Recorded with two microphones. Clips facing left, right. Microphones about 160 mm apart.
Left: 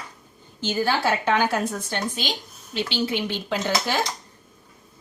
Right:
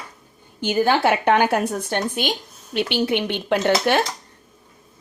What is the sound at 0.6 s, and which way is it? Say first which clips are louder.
A woman's voice: right 5 dB; 60° right (ahead or behind).